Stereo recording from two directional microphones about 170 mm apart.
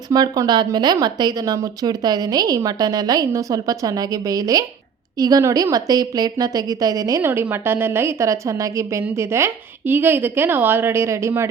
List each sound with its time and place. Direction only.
0.1 s a woman's voice: 25° right (ahead or behind)